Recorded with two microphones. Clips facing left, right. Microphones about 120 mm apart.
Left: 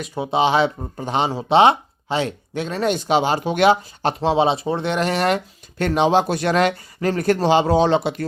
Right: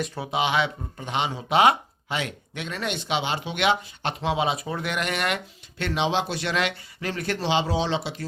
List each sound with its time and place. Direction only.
0.3 s speech: 30° left (ahead or behind); by 8.2 s 55° left (ahead or behind)